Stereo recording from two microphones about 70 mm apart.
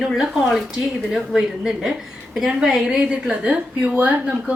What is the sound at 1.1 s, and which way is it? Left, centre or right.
A woman's voice, centre.